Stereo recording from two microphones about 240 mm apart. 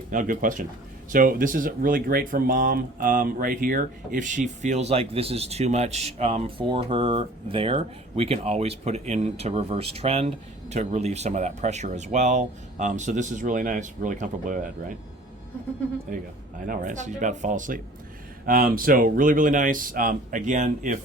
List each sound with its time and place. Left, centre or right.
0.1 s speech: right
16.6 s speech: right